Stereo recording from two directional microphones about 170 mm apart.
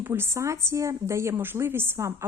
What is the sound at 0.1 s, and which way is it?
Speech, 15° right (ahead or behind).